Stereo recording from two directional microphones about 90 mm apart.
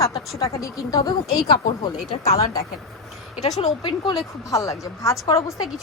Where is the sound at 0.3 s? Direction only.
40° left (ahead or behind).